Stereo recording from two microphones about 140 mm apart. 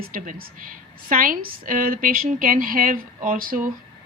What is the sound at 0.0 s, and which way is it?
A woman's voice, 90° right.